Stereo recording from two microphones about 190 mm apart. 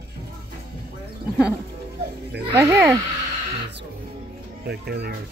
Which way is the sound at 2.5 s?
15° right (ahead or behind).